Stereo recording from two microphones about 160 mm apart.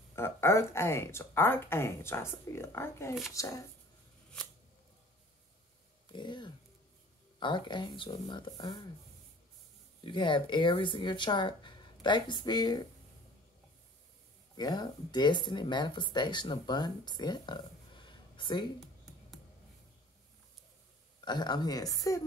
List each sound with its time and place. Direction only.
0.1 s speech: 15° left (ahead or behind)
6.1 s speech: 30° left (ahead or behind)
10.0 s speech: 30° left (ahead or behind)
14.6 s speech: 25° left (ahead or behind)
21.2 s speech: 25° left (ahead or behind)